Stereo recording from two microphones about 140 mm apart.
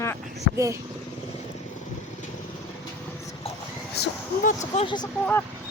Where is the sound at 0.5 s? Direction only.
20° right (ahead or behind).